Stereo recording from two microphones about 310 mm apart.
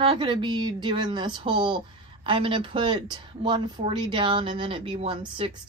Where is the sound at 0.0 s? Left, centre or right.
Centre.